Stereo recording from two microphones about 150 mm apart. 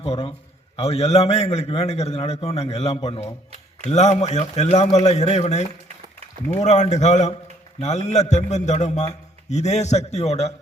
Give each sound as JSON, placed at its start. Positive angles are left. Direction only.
{"t": 0.0, "sound": "a man's voice", "side_deg": 40}